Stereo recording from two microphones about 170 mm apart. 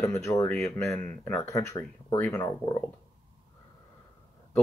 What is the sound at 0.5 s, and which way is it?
Speech, centre (ahead or behind).